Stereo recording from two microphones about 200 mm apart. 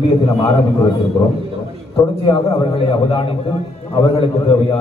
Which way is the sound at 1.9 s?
20° left (ahead or behind).